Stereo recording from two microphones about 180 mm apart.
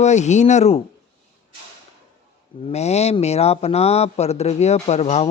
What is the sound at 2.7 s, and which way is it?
Speech, 35° left (ahead or behind).